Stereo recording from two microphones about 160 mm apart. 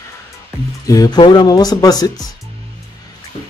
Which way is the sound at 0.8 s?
20° left (ahead or behind).